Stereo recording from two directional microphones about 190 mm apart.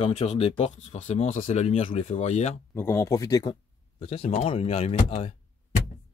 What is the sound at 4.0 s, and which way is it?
Speech, 30° left (ahead or behind).